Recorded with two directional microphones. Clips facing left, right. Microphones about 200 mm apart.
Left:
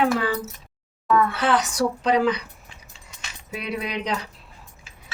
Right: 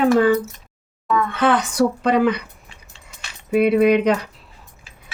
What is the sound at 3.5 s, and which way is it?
Speech, 55° right (ahead or behind).